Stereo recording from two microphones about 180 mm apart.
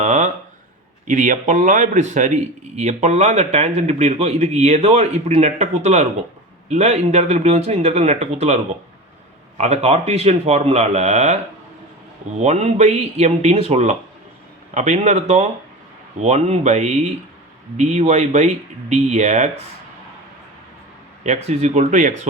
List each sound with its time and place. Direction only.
0.0 s a sound: 40° right (ahead or behind)
1.0 s a man's voice: 45° right (ahead or behind)
12.4 s a man's voice: 40° right (ahead or behind)
21.2 s a man's voice: 40° right (ahead or behind)